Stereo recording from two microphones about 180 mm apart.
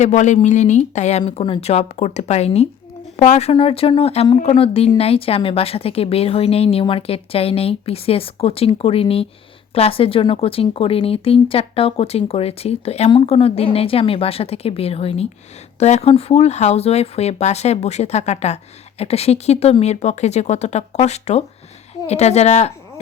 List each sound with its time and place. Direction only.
0.0 s speech: 40° left (ahead or behind)